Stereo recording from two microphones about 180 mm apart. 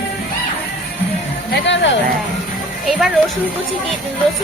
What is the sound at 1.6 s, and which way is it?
Speech, 85° left.